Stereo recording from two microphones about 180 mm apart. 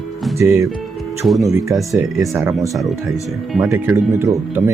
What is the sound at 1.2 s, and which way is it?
Speech, centre (ahead or behind).